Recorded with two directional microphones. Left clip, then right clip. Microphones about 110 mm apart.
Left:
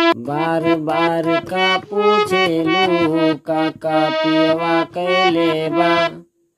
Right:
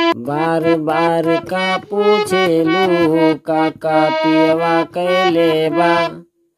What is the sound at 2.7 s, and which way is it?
Accordion, 5° right (ahead or behind).